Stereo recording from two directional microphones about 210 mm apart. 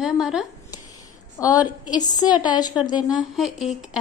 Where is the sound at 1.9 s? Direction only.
20° left (ahead or behind).